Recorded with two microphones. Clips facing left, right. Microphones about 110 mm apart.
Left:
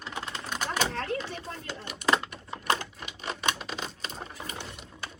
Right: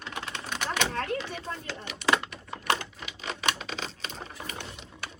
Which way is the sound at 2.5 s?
Centre (ahead or behind).